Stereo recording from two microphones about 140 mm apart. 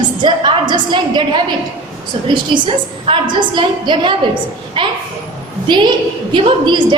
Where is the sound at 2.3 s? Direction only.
35° right (ahead or behind).